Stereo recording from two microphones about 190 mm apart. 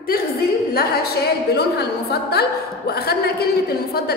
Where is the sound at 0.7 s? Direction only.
55° left (ahead or behind).